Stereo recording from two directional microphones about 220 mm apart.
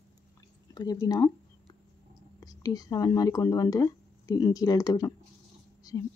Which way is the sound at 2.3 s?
15° left (ahead or behind).